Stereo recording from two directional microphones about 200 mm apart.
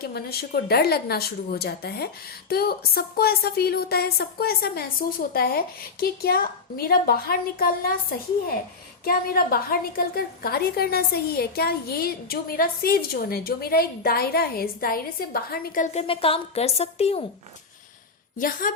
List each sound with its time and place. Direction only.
0.0 s a woman's voice: 50° left (ahead or behind)
9.0 s a woman's voice: 50° left (ahead or behind)
16.0 s a woman's voice: 30° left (ahead or behind)
18.3 s a woman's voice: 45° left (ahead or behind)